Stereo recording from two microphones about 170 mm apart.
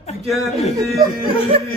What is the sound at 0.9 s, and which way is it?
Speech, 25° right (ahead or behind).